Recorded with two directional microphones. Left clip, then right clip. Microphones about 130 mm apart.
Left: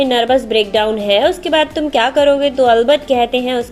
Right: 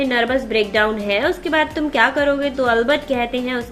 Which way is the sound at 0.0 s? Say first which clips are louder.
Left 5 dB; 20° left (ahead or behind).